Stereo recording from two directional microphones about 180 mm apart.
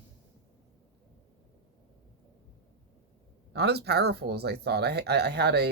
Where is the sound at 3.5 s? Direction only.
65° right (ahead or behind).